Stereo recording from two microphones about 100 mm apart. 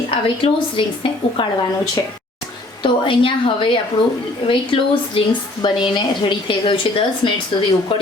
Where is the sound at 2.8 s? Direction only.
60° left (ahead or behind).